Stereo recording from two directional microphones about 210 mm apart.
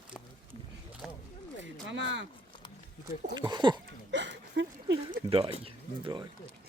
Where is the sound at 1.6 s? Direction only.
60° right (ahead or behind).